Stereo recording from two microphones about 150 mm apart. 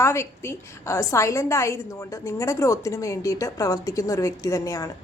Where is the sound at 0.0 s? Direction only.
15° left (ahead or behind).